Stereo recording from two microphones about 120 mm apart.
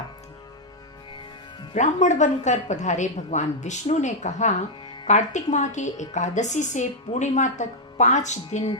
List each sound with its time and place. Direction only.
1.7 s a woman's voice: 75° left (ahead or behind)